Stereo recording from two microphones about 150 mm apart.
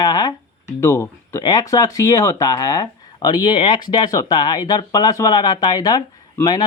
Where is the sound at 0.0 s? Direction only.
25° left (ahead or behind).